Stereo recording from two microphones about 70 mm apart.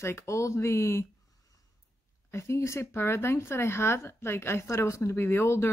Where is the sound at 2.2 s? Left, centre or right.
Left.